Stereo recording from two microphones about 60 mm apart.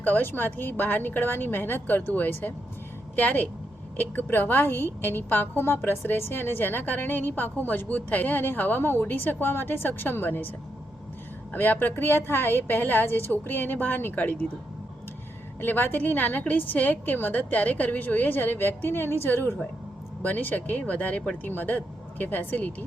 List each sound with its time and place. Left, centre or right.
0.0 s a woman's voice: left
11.5 s a woman's voice: left
15.6 s a woman's voice: left